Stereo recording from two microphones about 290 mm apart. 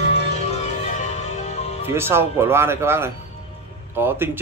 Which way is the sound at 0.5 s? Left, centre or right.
Left.